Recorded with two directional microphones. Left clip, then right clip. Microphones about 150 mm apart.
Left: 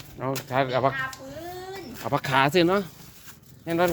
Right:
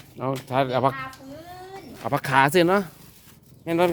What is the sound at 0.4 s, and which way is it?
Speech, 55° right (ahead or behind).